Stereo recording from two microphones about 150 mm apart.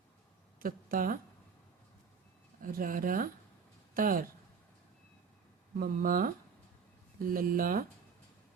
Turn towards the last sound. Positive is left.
turn(degrees=-65)  # may be behind; listen again after turning